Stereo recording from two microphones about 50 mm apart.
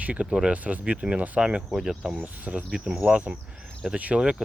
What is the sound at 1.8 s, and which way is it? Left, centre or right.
Speech, centre.